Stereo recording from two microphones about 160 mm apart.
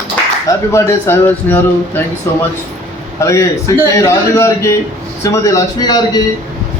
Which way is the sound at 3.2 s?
20° left (ahead or behind).